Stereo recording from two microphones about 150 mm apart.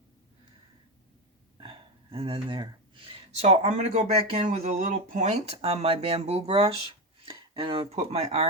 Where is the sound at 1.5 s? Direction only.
35° right (ahead or behind).